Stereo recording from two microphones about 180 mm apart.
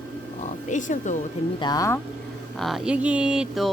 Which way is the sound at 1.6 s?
20° left (ahead or behind).